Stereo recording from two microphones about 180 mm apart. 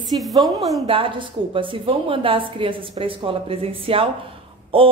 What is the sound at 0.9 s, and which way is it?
A woman's voice, 30° right (ahead or behind).